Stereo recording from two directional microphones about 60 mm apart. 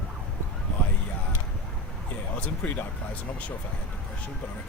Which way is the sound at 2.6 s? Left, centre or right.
Left.